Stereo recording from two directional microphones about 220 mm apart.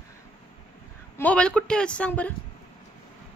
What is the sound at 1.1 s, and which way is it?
A man's voice, 5° left (ahead or behind).